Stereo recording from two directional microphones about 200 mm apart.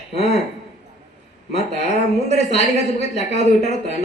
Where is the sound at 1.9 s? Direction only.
35° left (ahead or behind).